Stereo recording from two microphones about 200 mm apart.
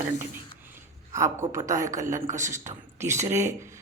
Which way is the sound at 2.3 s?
35° right (ahead or behind).